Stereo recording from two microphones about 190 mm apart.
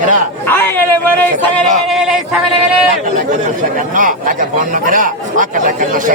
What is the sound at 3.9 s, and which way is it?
Speech, 45° right (ahead or behind).